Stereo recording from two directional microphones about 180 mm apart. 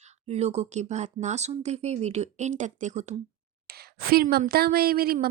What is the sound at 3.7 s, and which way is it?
A woman's voice, 60° right (ahead or behind).